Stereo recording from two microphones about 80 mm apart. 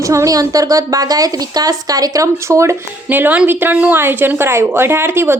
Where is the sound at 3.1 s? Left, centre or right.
Right.